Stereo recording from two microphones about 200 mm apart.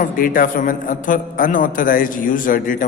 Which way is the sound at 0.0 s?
45° left (ahead or behind).